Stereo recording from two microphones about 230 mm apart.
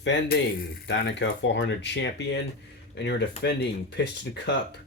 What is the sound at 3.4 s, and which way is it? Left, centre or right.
Speech, left.